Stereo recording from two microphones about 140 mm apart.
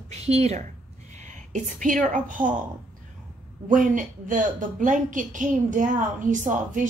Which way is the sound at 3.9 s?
70° right (ahead or behind).